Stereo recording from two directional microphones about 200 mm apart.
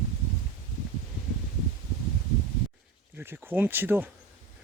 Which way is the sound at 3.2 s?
10° right (ahead or behind).